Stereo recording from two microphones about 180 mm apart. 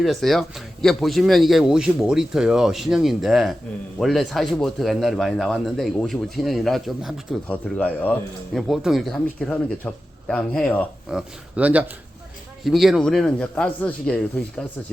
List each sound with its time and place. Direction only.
0.0 s a man's voice: centre (ahead or behind)
7.4 s a man's voice: 10° left (ahead or behind)
11.1 s a man's voice: 5° right (ahead or behind)